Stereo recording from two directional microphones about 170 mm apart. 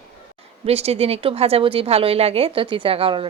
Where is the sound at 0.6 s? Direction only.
35° right (ahead or behind).